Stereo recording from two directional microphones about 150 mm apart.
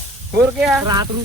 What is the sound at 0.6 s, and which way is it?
Speech, centre (ahead or behind).